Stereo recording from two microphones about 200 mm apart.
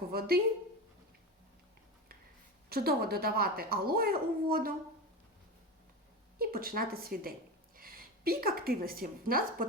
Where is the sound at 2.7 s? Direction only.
50° right (ahead or behind).